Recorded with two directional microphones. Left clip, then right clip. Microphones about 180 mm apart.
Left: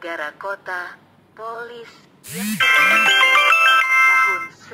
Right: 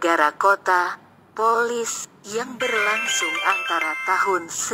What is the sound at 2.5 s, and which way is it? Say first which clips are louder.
Music: left 8 dB; 40° left (ahead or behind).